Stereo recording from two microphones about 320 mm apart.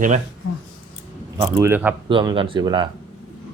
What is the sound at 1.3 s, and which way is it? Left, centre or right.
Speech, centre.